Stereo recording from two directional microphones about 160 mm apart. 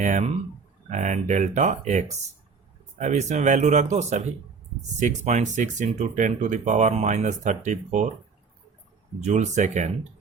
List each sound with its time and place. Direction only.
0.0 s speech: 50° right (ahead or behind)
9.2 s speech: 50° right (ahead or behind)